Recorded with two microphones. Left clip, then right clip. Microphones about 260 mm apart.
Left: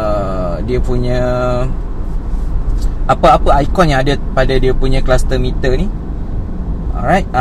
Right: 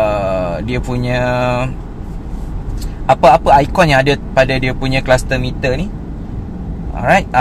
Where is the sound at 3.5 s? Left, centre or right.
Right.